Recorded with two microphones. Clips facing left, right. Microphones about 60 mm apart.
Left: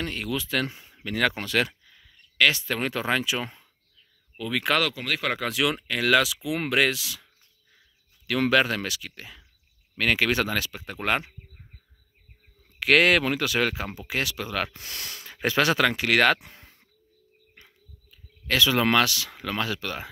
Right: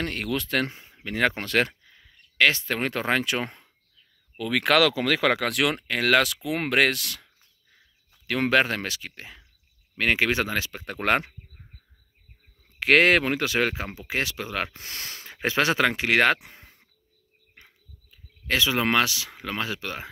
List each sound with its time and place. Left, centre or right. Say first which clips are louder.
0.0 s speech: right 2 dB; right
0.7 s speech: left 1 dB; right
1.4 s speech: right 2 dB; right
4.4 s speech: right 4 dB; right
8.3 s speech: even; right
10.8 s speech: right 6 dB; right
12.7 s speech: right 1 dB; right
17.6 s a sound: right 1 dB; right